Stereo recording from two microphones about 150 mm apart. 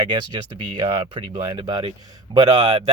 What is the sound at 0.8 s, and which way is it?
Speech, 35° right (ahead or behind).